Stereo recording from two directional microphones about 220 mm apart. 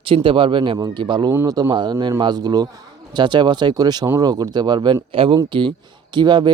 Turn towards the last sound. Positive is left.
turn(degrees=-20)  # may be behind; listen again after turning